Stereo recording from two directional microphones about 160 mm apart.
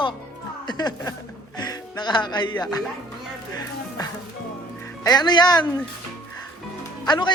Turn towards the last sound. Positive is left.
turn(degrees=25)  # may be behind; listen again after turning